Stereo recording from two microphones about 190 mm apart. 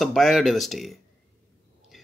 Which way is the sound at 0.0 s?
Centre (ahead or behind).